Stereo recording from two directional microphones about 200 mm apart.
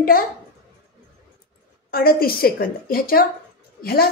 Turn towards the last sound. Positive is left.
turn(degrees=50)  # may be behind; listen again after turning